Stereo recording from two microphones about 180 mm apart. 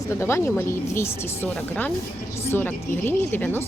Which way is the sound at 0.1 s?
15° left (ahead or behind).